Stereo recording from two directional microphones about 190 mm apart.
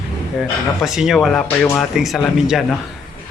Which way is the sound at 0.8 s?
Centre (ahead or behind).